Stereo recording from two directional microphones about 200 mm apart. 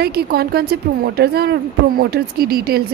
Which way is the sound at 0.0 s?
50° right (ahead or behind).